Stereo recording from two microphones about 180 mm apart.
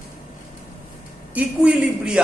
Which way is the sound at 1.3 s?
5° right (ahead or behind).